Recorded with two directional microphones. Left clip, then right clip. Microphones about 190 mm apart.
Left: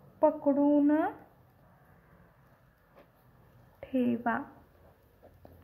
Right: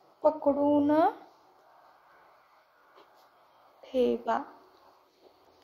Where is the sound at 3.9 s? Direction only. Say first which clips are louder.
Right 4 dB; 50° right (ahead or behind).